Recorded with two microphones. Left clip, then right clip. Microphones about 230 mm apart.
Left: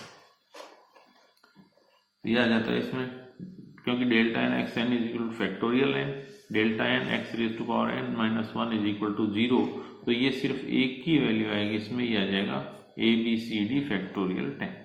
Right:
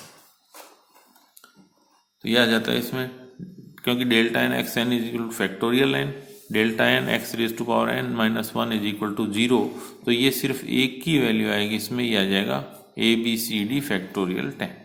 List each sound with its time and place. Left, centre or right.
2.2 s speech: right